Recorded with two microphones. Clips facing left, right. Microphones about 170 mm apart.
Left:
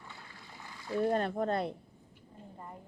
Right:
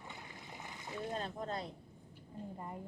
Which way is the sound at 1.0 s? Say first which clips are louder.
Left 10 dB; 65° left (ahead or behind).